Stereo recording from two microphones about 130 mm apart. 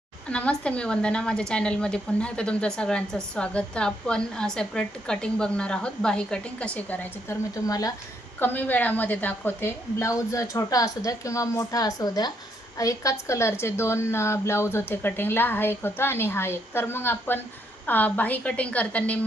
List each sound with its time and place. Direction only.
0.3 s speech: 10° left (ahead or behind)
7.5 s a woman's voice: 25° left (ahead or behind)
8.4 s a woman's voice: 15° left (ahead or behind)